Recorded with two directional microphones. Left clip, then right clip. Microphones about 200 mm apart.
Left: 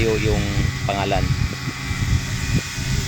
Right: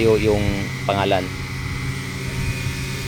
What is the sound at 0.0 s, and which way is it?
Speech, 30° right (ahead or behind).